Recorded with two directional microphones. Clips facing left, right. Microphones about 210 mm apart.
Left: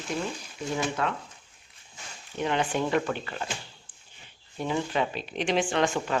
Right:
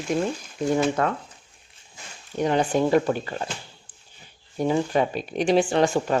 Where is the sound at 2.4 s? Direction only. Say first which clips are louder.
Right 6 dB; 40° right (ahead or behind).